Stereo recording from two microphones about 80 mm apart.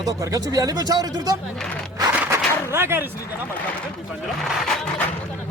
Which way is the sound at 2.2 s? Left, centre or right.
Right.